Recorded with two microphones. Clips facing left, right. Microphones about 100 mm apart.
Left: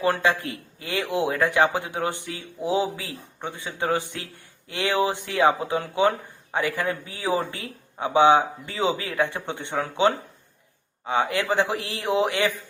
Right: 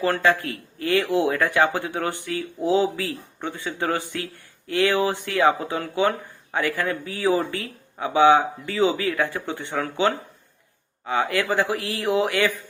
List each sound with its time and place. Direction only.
0.0 s speech: 20° left (ahead or behind)